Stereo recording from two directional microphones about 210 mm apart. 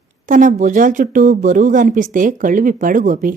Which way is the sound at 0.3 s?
35° right (ahead or behind).